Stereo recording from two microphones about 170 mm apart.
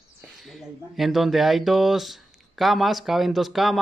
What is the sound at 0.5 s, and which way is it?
Speech, centre (ahead or behind).